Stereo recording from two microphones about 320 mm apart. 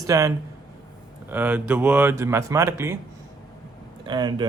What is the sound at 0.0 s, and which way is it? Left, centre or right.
Speech, centre.